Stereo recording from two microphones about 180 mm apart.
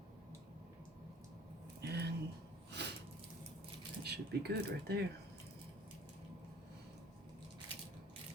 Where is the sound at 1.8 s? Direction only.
65° right (ahead or behind).